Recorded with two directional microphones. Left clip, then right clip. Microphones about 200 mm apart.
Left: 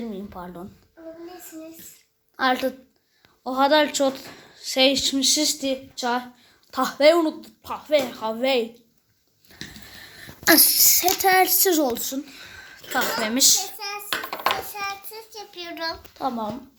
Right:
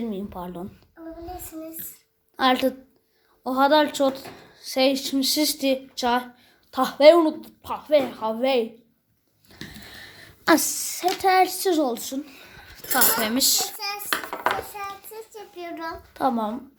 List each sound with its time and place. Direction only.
0.0 s speech: 15° right (ahead or behind)
2.3 s a woman's voice: 20° right (ahead or behind)
3.4 s speech: 5° right (ahead or behind)
9.5 s a sound: 15° right (ahead or behind)
10.8 s speech: 5° left (ahead or behind)
13.7 s a child's voice: 15° right (ahead or behind)
16.1 s speech: 20° right (ahead or behind)